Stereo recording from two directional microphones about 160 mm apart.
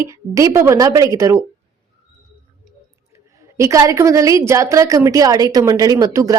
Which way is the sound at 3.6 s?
20° right (ahead or behind).